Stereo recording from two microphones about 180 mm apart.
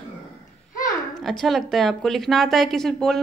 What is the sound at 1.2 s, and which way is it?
Speech, centre (ahead or behind).